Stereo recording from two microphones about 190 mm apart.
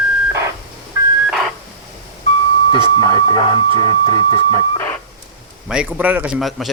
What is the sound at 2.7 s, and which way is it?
Speech, 25° left (ahead or behind).